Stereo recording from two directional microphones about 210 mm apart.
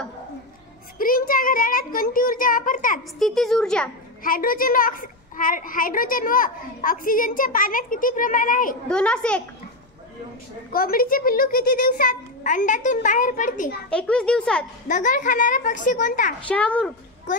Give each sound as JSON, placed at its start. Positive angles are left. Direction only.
{"t": 0.9, "sound": "a child's voice", "side_deg": 40}
{"t": 3.2, "sound": "a child's voice", "side_deg": 0}
{"t": 4.2, "sound": "a child's voice", "side_deg": 45}
{"t": 8.8, "sound": "a child's voice", "side_deg": 5}
{"t": 10.7, "sound": "a child's voice", "side_deg": 45}
{"t": 13.8, "sound": "a child's voice", "side_deg": 5}
{"t": 14.9, "sound": "a child's voice", "side_deg": 40}
{"t": 16.4, "sound": "a child's voice", "side_deg": 5}